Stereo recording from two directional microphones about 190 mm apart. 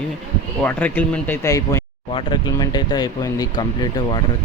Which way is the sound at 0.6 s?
10° left (ahead or behind).